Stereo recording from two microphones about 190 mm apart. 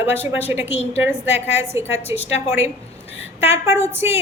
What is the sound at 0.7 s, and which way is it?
Speech, 35° left (ahead or behind).